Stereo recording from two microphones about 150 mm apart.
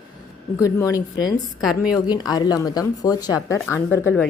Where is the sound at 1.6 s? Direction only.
5° right (ahead or behind).